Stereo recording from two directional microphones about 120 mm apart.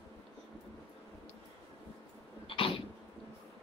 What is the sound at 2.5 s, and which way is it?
Cough, 50° left (ahead or behind).